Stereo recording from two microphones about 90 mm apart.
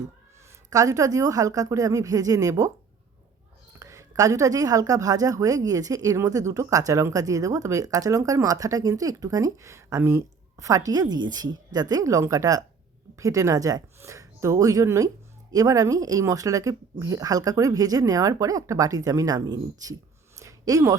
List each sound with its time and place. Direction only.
0.7 s speech: 40° right (ahead or behind)
3.8 s a woman's voice: 35° right (ahead or behind)
20.4 s a sound: 40° right (ahead or behind)